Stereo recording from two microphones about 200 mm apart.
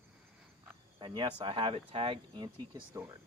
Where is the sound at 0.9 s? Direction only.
25° right (ahead or behind).